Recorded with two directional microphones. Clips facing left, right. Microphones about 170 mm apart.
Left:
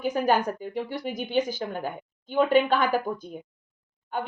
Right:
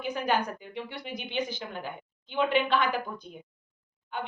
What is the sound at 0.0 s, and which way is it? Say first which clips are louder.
A woman's voice: left 5 dB; 45° left (ahead or behind).